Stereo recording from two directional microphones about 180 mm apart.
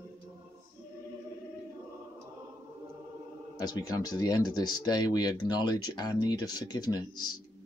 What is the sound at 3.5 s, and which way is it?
Speech, 20° left (ahead or behind).